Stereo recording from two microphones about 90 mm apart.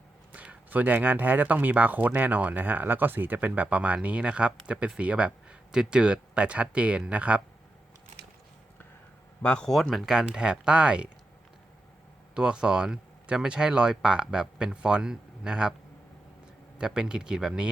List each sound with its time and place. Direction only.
0.3 s speech: 15° right (ahead or behind)
9.4 s speech: 10° left (ahead or behind); by 11.1 s 10° right (ahead or behind)
12.3 s speech: 10° right (ahead or behind)
16.7 s speech: 10° right (ahead or behind)